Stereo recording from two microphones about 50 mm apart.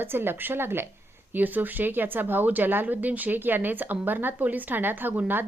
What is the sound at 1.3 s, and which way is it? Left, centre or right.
A woman's voice, right.